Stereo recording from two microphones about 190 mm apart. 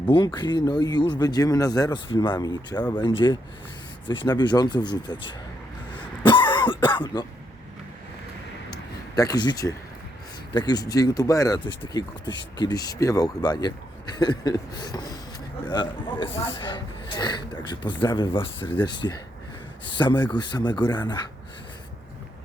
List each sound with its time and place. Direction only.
0.3 s speech: 20° left (ahead or behind)
6.2 s cough: 25° left (ahead or behind)
8.7 s a sound: 20° left (ahead or behind)
10.5 s speech: 20° left (ahead or behind)